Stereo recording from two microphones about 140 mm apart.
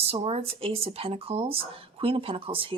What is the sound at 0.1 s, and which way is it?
Speech, 45° right (ahead or behind).